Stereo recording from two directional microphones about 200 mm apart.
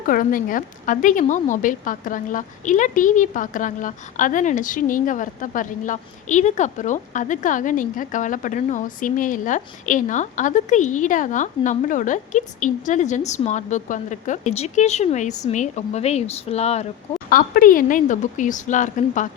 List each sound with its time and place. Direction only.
0.0 s a woman's voice: 45° left (ahead or behind)
17.2 s a woman's voice: 45° left (ahead or behind)